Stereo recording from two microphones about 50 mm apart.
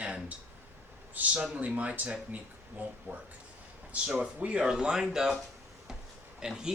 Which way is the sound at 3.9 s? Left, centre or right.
Right.